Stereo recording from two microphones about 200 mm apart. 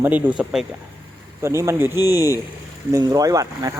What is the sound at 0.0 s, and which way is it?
Speech, 10° right (ahead or behind).